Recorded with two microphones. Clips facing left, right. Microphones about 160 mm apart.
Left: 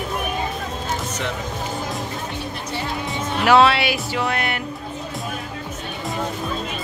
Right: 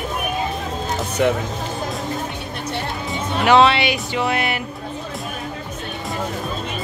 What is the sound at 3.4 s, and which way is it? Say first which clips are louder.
Speech: right 1 dB; 5° left (ahead or behind).